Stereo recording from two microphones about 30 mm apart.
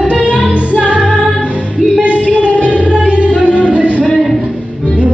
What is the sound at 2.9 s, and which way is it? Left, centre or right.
Music, right.